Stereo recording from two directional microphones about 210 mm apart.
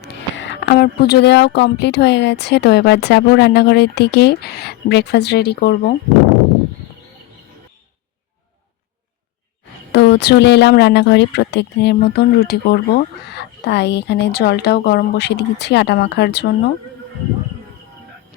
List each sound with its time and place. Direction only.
0.0 s speech: 55° left (ahead or behind)
9.9 s speech: 55° left (ahead or behind)